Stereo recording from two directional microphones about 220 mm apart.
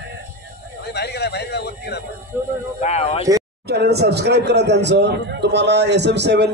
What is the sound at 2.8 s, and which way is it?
Speech, 30° left (ahead or behind).